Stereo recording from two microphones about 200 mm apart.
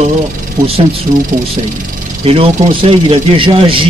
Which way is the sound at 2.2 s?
30° right (ahead or behind).